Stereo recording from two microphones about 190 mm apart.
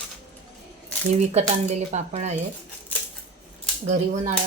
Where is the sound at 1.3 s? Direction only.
35° right (ahead or behind).